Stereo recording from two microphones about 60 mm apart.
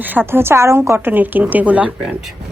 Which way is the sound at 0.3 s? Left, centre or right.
Right.